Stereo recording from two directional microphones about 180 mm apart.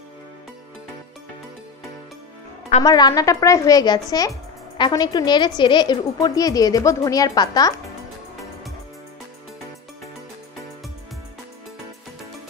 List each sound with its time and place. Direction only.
2.8 s a woman's voice: 20° left (ahead or behind)